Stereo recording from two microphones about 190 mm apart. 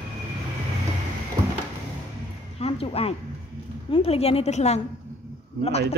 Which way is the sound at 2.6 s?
30° left (ahead or behind).